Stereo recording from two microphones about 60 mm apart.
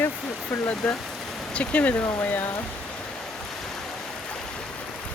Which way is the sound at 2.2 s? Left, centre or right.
Left.